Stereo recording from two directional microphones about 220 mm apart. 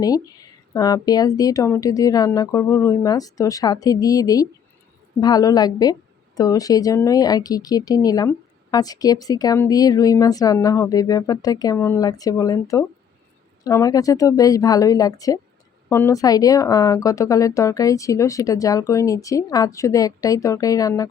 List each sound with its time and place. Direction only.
0.7 s a woman's voice: 15° left (ahead or behind)